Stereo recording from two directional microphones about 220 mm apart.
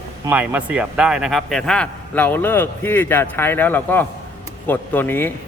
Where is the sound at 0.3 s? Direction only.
5° right (ahead or behind).